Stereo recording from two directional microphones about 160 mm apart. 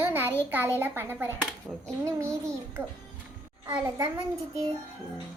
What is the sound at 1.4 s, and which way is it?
Speech, 5° left (ahead or behind).